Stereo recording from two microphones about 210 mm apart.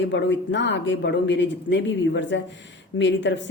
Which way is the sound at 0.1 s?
60° left (ahead or behind).